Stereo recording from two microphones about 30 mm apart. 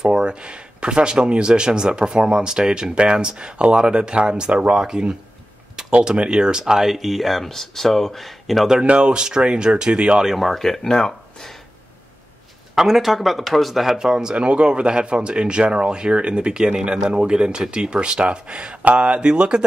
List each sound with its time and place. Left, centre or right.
0.0 s speech: right
5.8 s a sound: centre
6.1 s speech: right
6.6 s speech: centre
8.8 s speech: right
10.3 s speech: centre
10.8 s speech: centre
12.7 s speech: centre
13.9 s speech: right
14.3 s speech: right